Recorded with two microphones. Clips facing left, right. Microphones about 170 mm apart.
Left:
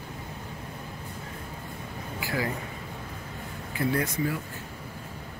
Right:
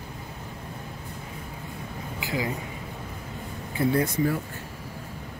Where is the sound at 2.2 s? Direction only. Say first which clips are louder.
Right 1 dB; 20° right (ahead or behind).